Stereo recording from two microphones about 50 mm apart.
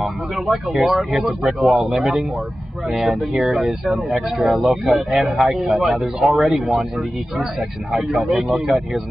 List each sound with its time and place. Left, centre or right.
0.0 s speech: centre